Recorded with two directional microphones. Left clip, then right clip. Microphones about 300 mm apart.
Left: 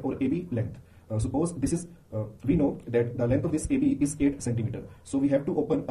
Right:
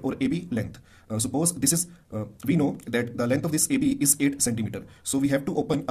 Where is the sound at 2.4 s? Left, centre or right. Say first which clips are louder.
Right 1 dB; right.